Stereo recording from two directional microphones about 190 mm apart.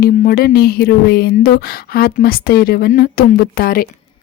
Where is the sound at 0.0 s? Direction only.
50° left (ahead or behind).